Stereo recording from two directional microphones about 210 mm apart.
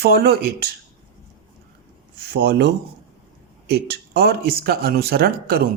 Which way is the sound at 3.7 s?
50° right (ahead or behind).